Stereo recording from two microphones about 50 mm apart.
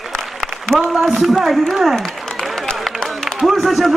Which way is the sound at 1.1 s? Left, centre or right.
Centre.